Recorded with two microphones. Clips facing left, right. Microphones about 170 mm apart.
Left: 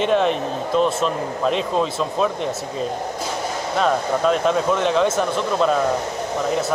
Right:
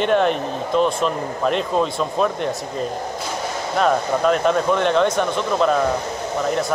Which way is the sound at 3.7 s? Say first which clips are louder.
Right 1 dB; centre (ahead or behind).